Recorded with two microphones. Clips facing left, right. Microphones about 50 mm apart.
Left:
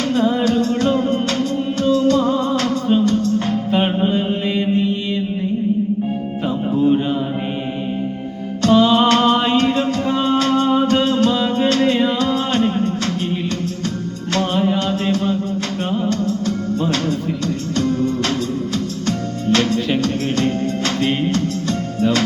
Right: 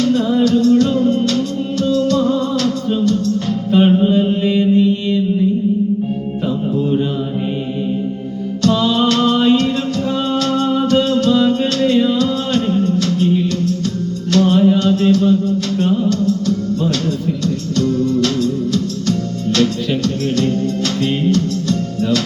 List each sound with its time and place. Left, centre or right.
0.0 s music: left
8.6 s music: left